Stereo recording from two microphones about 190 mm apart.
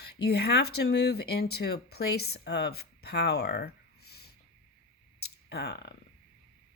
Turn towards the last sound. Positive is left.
turn(degrees=65)  # may be behind; listen again after turning